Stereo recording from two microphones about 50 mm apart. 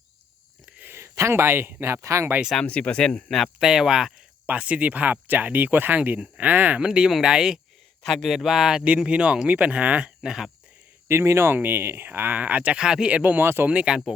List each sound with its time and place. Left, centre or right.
0.9 s speech: right
2.6 s speech: left
3.2 s speech: centre
3.6 s speech: centre
4.4 s speech: right
6.7 s speech: centre
8.0 s speech: centre; by 10.1 s right
10.2 s speech: centre
11.1 s speech: right
12.3 s speech: right
12.8 s speech: centre
13.1 s speech: right
13.4 s speech: right
13.7 s speech: right